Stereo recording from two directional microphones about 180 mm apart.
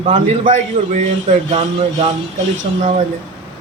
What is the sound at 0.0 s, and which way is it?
A man's voice, 40° right (ahead or behind).